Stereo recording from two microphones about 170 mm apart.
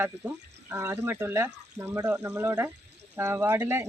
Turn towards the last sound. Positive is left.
turn(degrees=-15)  # may be behind; listen again after turning